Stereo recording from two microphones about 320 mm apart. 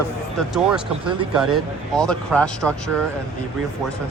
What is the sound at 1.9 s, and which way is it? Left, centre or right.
Speech, centre.